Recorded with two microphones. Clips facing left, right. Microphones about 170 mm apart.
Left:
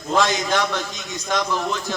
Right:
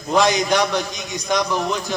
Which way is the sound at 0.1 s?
15° right (ahead or behind).